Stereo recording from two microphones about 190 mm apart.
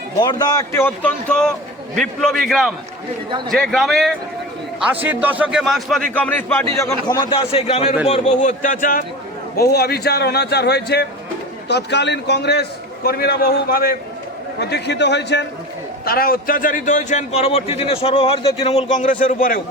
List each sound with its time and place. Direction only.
0.2 s a man's voice: 20° left (ahead or behind); by 9.0 s 45° left (ahead or behind)
9.7 s a man's voice: 55° left (ahead or behind)
14.6 s a man's voice: 60° left (ahead or behind)
16.0 s a man's voice: 50° left (ahead or behind)